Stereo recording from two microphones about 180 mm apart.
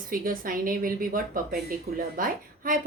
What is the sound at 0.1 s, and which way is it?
A woman's voice, 50° right (ahead or behind).